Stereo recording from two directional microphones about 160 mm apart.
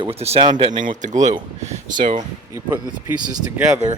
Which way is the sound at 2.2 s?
20° right (ahead or behind).